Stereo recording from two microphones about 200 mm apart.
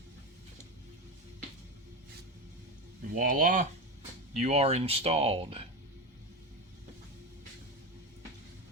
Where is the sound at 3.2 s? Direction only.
45° right (ahead or behind).